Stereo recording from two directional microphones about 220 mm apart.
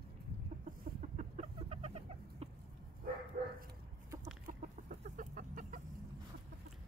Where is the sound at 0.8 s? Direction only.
30° right (ahead or behind).